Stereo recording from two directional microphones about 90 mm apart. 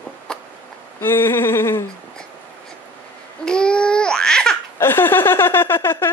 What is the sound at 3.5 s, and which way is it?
Babbling, 10° left (ahead or behind).